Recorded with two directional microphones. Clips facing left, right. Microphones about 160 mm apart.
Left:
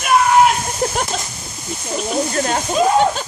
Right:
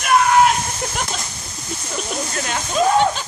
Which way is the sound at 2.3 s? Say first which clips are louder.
Left 6 dB; 35° left (ahead or behind).